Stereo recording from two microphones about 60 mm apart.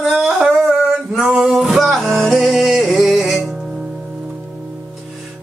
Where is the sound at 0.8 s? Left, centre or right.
Centre.